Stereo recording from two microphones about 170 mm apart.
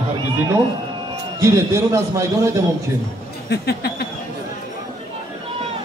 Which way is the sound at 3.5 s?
70° left (ahead or behind).